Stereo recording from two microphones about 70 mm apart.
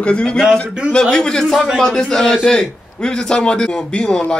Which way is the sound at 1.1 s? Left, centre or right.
Centre.